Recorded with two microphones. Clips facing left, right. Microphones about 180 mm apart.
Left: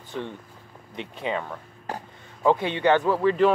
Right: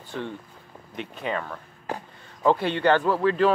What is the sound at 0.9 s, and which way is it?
Speech, 20° left (ahead or behind).